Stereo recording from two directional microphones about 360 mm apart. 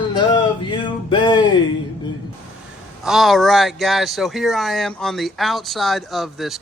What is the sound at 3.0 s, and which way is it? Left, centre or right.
A man's voice, centre.